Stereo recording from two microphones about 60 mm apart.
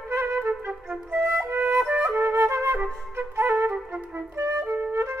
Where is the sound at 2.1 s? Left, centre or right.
Right.